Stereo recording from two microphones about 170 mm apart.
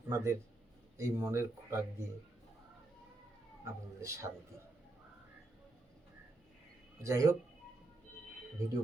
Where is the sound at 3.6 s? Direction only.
15° right (ahead or behind).